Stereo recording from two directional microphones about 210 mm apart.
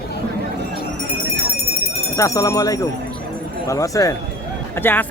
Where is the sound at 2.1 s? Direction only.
15° left (ahead or behind).